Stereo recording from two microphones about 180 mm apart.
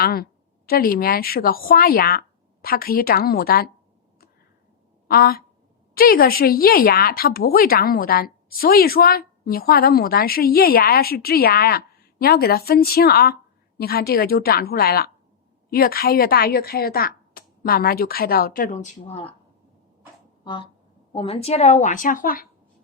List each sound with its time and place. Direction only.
0.0 s a woman's voice: 55° left (ahead or behind)
5.0 s a sound: 60° left (ahead or behind)
6.0 s a woman's voice: 55° left (ahead or behind); by 19.3 s 35° left (ahead or behind)
20.4 s a woman's voice: 25° left (ahead or behind); by 22.4 s 50° left (ahead or behind)